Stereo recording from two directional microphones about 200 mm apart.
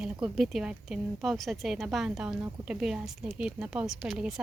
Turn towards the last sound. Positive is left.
turn(degrees=0)  # may be behind; listen again after turning